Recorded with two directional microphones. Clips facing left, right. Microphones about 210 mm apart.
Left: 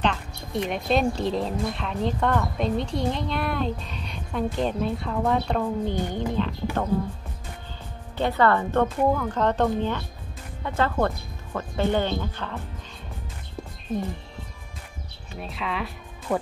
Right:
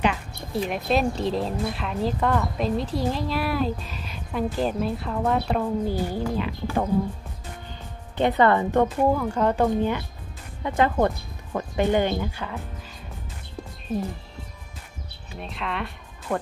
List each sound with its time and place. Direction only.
0.0 s a woman's voice: 5° right (ahead or behind)
8.2 s speech: 20° right (ahead or behind)
13.9 s a woman's voice: centre (ahead or behind)
15.3 s speech: centre (ahead or behind)